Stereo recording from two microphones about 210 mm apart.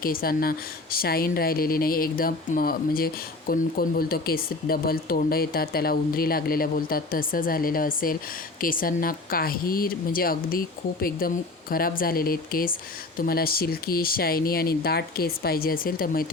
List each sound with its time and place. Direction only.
0.0 s a woman's voice: 45° left (ahead or behind)